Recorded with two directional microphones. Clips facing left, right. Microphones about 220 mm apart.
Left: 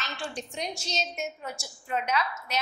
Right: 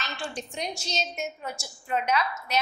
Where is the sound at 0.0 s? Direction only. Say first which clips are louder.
Right 1 dB; 15° right (ahead or behind).